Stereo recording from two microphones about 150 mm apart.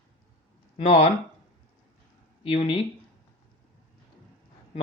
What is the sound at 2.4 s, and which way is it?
Speech, 40° left (ahead or behind).